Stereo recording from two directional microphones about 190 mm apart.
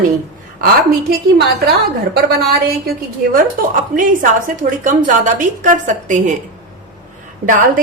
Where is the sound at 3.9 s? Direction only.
45° right (ahead or behind).